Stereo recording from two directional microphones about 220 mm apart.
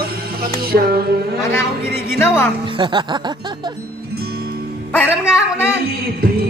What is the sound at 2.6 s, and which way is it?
Speech, 20° right (ahead or behind).